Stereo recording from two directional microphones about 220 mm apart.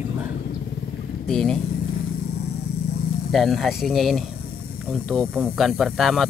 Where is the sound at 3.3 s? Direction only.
Centre (ahead or behind).